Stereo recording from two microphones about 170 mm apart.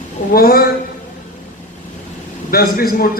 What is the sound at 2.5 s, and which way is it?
Speech, 60° left (ahead or behind).